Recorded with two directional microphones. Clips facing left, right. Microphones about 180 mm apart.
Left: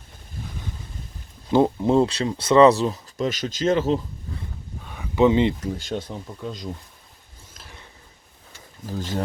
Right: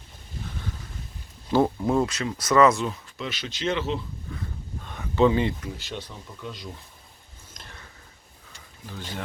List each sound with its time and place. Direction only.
1.5 s speech: 20° left (ahead or behind); by 4.0 s 45° left (ahead or behind)
4.8 s a sound: 10° left (ahead or behind)
5.7 s speech: 50° left (ahead or behind)
8.9 s speech: 40° left (ahead or behind)